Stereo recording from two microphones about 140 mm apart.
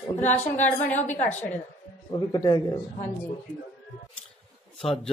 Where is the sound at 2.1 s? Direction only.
30° left (ahead or behind).